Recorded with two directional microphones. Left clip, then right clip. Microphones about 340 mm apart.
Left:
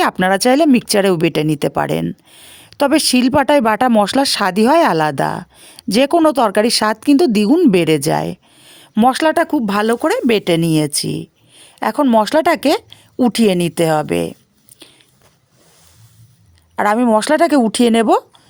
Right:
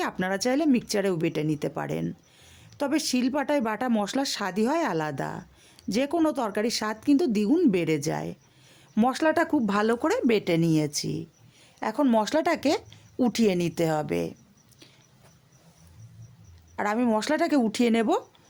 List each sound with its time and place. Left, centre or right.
0.0 s speech: left
14.8 s a sound: left
16.7 s speech: left